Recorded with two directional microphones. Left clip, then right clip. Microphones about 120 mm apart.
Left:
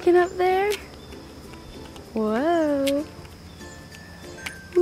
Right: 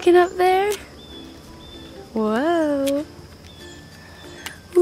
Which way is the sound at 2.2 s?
20° right (ahead or behind).